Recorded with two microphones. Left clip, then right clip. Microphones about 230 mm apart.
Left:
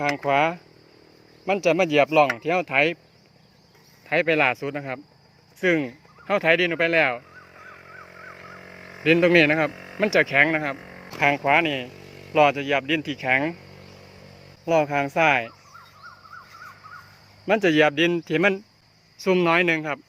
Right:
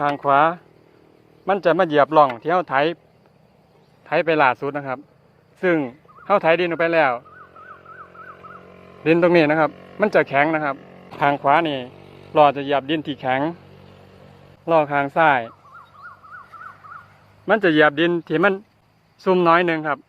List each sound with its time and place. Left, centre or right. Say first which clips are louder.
0.3 s speech: right 6 dB; centre
4.0 s speech: right 3 dB; centre
8.1 s a sound: right 2 dB; right
8.7 s speech: right 2 dB; centre
9.7 s a sound: left 2 dB; centre
10.0 s speech: right 2 dB; centre
10.8 s a sound: left 1 dB; centre
11.4 s speech: right 3 dB; centre
11.9 s a sound: even; centre
12.3 s speech: right 3 dB; centre
14.6 s speech: right 3 dB; centre
17.4 s speech: right 3 dB; centre